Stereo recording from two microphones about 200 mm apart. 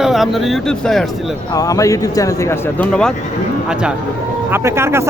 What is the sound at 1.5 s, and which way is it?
A man's voice, 15° left (ahead or behind).